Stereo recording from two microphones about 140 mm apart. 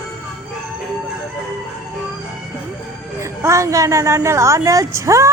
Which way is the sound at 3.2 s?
20° right (ahead or behind).